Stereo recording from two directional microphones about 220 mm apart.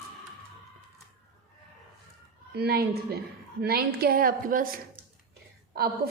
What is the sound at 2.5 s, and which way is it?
A woman's voice, 45° right (ahead or behind).